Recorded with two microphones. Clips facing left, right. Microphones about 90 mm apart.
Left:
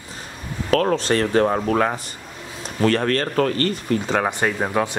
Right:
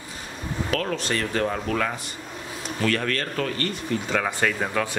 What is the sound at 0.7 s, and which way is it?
A man's voice, 40° left (ahead or behind).